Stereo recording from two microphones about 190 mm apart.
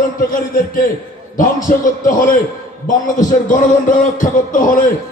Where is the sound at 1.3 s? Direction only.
45° left (ahead or behind).